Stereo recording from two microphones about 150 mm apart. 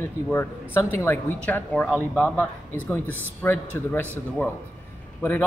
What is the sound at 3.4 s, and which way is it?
A woman's voice, 15° left (ahead or behind).